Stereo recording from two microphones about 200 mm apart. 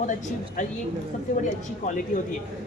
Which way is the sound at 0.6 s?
40° left (ahead or behind).